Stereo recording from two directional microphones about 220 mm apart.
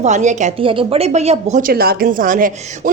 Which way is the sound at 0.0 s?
35° right (ahead or behind).